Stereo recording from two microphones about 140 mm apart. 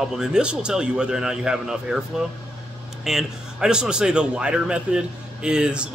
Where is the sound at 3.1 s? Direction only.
5° right (ahead or behind).